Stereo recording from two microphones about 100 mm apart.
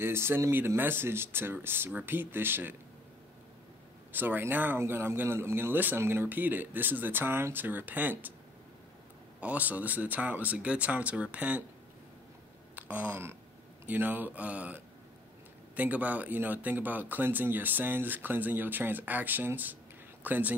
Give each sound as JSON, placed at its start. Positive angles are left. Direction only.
{"t": 0.0, "sound": "speech", "side_deg": -25}
{"t": 4.1, "sound": "speech", "side_deg": -20}
{"t": 9.4, "sound": "speech", "side_deg": -15}
{"t": 12.7, "sound": "speech", "side_deg": -15}